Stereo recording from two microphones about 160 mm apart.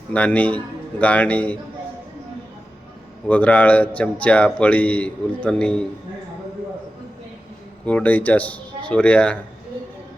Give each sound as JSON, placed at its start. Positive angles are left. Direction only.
{"t": 0.1, "sound": "a man's voice", "side_deg": 10}
{"t": 3.2, "sound": "a man's voice", "side_deg": 10}
{"t": 7.9, "sound": "a man's voice", "side_deg": 10}